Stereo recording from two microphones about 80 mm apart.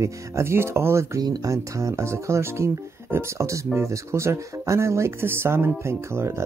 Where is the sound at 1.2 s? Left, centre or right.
Right.